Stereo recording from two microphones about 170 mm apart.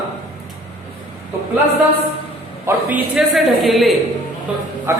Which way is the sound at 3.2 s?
Centre (ahead or behind).